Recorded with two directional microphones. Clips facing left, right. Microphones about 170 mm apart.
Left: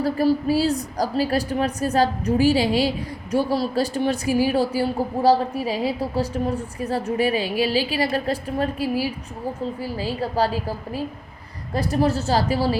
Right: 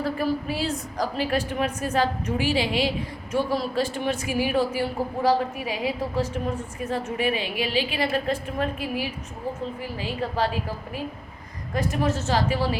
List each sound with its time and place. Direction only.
0.0 s a woman's voice: 35° left (ahead or behind)